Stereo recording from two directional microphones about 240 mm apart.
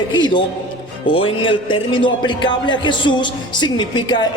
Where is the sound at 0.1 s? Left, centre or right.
Centre.